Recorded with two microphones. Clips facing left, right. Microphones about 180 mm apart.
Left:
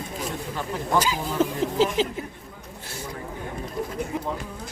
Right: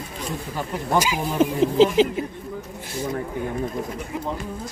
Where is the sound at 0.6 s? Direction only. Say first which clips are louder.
Right 2 dB; 15° right (ahead or behind).